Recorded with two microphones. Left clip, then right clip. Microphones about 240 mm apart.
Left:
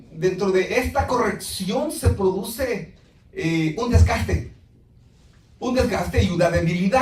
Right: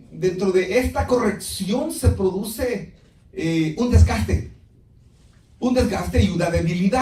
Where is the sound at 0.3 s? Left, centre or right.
Right.